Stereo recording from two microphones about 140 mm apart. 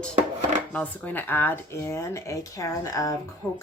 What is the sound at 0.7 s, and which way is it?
Speech, 10° left (ahead or behind).